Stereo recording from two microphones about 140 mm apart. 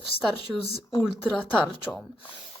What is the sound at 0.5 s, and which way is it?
Speech, 5° right (ahead or behind).